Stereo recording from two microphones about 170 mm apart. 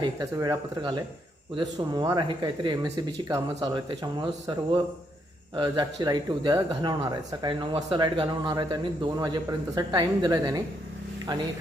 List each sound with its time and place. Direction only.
0.0 s speech: 20° right (ahead or behind)